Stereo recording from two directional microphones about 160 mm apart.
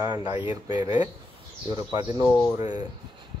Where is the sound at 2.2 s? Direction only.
5° left (ahead or behind).